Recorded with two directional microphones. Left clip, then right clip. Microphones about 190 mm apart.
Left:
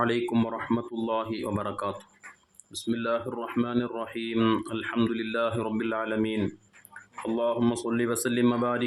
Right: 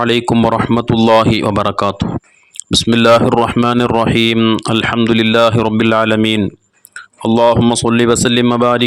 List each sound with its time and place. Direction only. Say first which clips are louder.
0.0 s speech: right 14 dB; 45° right (ahead or behind)
4.4 s speech: right 11 dB; 35° right (ahead or behind)
4.6 s speech: right 16 dB; 50° right (ahead or behind)
7.6 s speech: right 15 dB; 55° right (ahead or behind)